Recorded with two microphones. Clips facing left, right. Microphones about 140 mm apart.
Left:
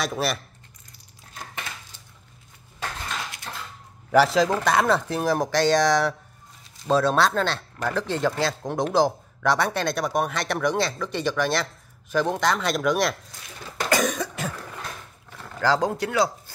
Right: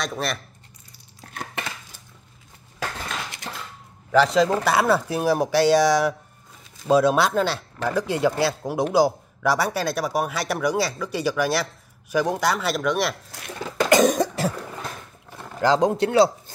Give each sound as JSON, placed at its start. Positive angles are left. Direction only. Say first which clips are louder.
{"t": 0.0, "sound": "speech", "louder": "left 1 dB", "side_deg": 5}
{"t": 1.3, "sound": "a sound", "louder": "right 5 dB", "side_deg": -65}
{"t": 4.1, "sound": "speech", "louder": "right 1 dB", "side_deg": 5}
{"t": 4.6, "sound": "speech", "louder": "right 1 dB", "side_deg": -5}
{"t": 13.3, "sound": "a sound", "louder": "right 9 dB", "side_deg": -70}
{"t": 14.0, "sound": "cough", "louder": "right 7 dB", "side_deg": -35}
{"t": 15.6, "sound": "speech", "louder": "right 4 dB", "side_deg": -20}